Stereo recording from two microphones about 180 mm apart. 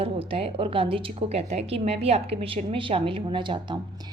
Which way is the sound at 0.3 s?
30° right (ahead or behind).